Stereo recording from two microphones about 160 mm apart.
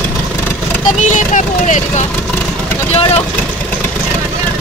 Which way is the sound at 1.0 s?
50° left (ahead or behind).